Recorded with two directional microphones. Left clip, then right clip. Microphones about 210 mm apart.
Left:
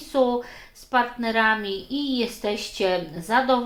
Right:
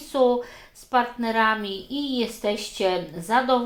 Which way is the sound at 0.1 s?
25° right (ahead or behind).